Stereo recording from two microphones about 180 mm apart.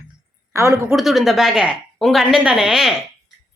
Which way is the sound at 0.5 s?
15° right (ahead or behind).